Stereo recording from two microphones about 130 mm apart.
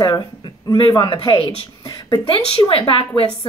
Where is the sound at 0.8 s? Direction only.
30° left (ahead or behind).